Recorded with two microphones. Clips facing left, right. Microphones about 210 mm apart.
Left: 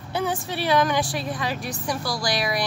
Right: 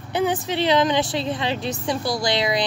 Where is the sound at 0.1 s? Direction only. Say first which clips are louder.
Right 4 dB; 20° right (ahead or behind).